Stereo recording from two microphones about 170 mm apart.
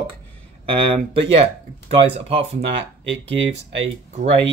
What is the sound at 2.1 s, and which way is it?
Speech, 35° right (ahead or behind).